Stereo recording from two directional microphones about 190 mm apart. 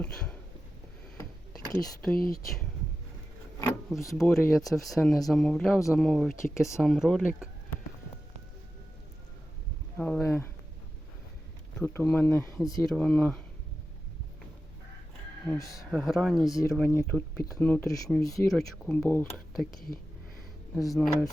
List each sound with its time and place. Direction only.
0.0 s a sound: 5° left (ahead or behind)
2.1 s speech: 50° left (ahead or behind)
3.8 s speech: centre (ahead or behind)
10.0 s a sound: 10° left (ahead or behind)
11.8 s speech: 10° left (ahead or behind)
12.9 s speech: 5° left (ahead or behind)
15.4 s speech: 15° left (ahead or behind)
15.9 s speech: centre (ahead or behind)
16.5 s speech: 20° left (ahead or behind)
18.5 s speech: 5° left (ahead or behind)
20.7 s speech: centre (ahead or behind)